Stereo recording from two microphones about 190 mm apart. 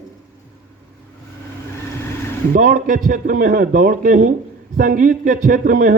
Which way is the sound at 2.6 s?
45° right (ahead or behind).